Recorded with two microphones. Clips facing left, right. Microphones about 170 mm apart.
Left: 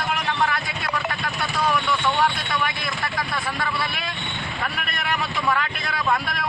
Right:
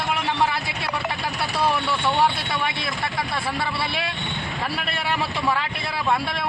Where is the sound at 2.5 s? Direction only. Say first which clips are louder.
Even; 25° right (ahead or behind).